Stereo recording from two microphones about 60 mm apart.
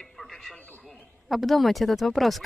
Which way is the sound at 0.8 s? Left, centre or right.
Centre.